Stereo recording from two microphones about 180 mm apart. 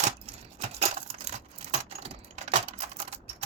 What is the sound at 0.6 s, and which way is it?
Coin, 35° right (ahead or behind).